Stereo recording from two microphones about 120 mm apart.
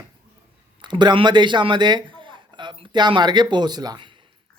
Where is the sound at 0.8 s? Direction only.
40° right (ahead or behind).